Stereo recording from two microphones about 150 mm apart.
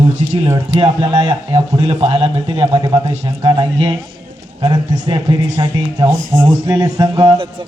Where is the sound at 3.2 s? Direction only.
25° right (ahead or behind).